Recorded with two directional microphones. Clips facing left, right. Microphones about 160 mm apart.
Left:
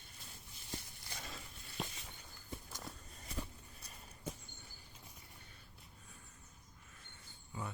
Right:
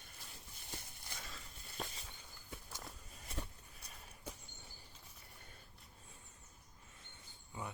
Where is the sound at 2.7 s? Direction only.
Centre (ahead or behind).